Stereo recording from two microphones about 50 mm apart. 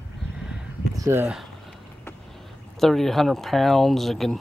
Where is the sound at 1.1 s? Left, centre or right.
Right.